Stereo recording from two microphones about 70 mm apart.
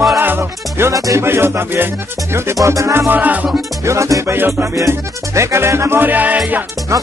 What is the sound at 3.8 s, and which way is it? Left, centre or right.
Music, right.